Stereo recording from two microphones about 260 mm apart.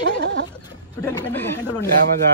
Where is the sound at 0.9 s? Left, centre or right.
Centre.